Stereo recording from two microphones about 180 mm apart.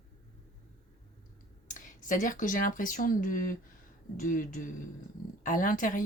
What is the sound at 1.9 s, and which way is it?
Speech, 45° left (ahead or behind).